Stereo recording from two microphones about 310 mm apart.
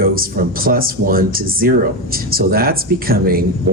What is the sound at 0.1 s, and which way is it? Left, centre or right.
Speech, right.